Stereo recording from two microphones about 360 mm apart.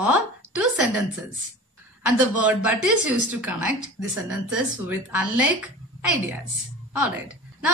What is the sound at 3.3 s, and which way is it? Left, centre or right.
Speech, centre.